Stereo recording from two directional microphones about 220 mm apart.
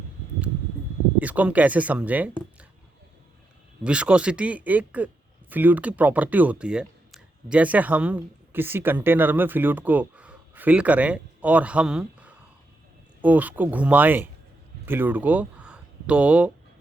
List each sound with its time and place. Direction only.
1.2 s speech: 5° right (ahead or behind)
3.8 s speech: 5° right (ahead or behind)